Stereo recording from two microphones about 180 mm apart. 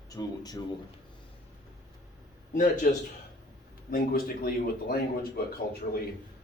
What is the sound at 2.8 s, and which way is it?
Speech, 50° left (ahead or behind).